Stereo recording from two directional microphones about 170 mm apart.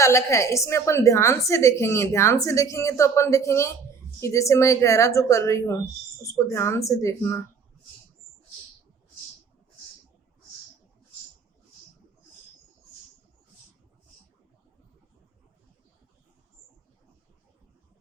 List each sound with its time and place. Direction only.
0.0 s a woman's voice: 15° left (ahead or behind)